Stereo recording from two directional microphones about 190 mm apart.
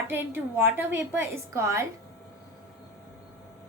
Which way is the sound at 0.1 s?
10° right (ahead or behind).